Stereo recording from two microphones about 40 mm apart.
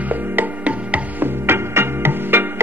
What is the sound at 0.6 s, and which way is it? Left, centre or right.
Music, right.